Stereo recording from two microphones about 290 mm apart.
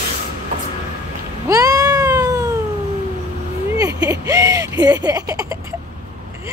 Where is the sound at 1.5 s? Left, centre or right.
Centre.